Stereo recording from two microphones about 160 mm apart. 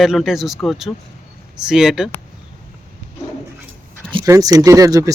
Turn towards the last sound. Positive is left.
turn(degrees=-20)  # may be behind; listen again after turning